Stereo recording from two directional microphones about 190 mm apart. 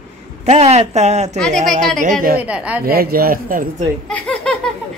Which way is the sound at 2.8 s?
55° right (ahead or behind).